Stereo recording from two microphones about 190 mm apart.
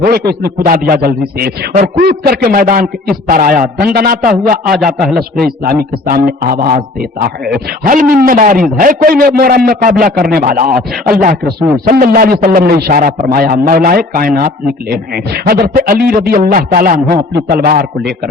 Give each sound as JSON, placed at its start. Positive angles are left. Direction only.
{"t": 0.0, "sound": "a man's voice", "side_deg": -50}
{"t": 4.9, "sound": "a man's voice", "side_deg": 0}
{"t": 5.6, "sound": "a man's voice", "side_deg": -50}